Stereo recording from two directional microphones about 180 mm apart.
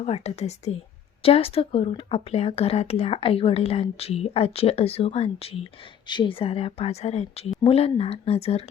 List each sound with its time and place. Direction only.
0.0 s speech: 35° left (ahead or behind)